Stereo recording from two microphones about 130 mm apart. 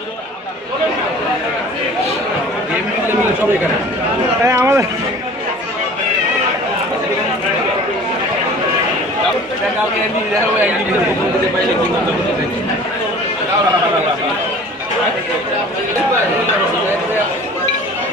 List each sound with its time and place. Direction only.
4.4 s speech: 20° right (ahead or behind)